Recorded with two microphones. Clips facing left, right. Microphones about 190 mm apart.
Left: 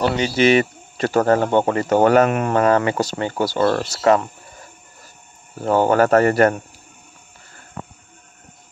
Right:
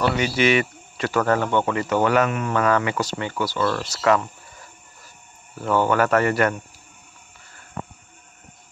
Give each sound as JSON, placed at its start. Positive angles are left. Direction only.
{"t": 0.1, "sound": "speech", "side_deg": 35}
{"t": 2.6, "sound": "speech", "side_deg": 40}
{"t": 3.8, "sound": "speech", "side_deg": 30}
{"t": 5.6, "sound": "speech", "side_deg": 40}